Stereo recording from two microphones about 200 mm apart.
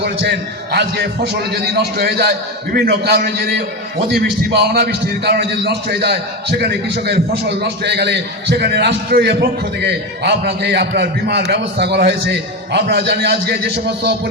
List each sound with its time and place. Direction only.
0.0 s a man's voice: 55° right (ahead or behind)